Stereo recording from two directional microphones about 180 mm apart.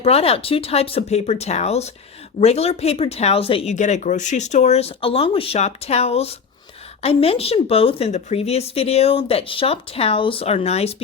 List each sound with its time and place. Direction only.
0.0 s speech: 35° left (ahead or behind)